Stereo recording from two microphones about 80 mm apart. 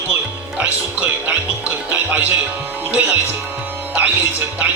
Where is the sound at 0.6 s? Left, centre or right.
Centre.